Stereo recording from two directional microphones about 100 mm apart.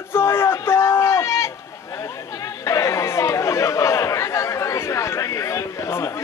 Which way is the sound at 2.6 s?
30° left (ahead or behind).